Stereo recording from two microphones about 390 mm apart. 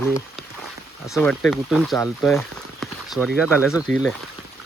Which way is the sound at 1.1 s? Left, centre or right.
Centre.